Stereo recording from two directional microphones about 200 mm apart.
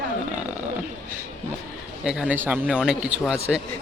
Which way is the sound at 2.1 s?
5° right (ahead or behind).